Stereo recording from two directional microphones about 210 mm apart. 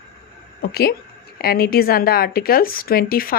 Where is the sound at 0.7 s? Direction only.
50° left (ahead or behind).